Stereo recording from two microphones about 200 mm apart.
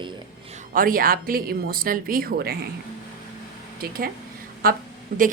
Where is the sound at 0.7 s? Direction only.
45° right (ahead or behind).